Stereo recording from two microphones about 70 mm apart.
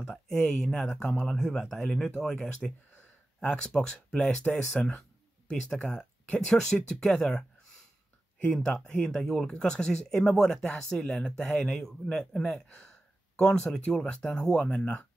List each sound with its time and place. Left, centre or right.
0.1 s speech: centre
8.6 s speech: centre